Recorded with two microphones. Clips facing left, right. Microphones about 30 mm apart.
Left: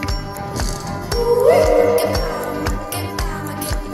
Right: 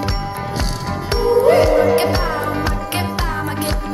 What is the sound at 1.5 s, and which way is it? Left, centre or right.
Music, right.